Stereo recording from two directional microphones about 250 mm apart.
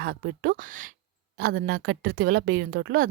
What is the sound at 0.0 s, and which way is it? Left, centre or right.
A woman's voice, right.